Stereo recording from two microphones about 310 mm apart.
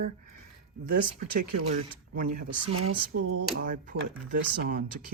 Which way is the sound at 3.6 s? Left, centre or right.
Right.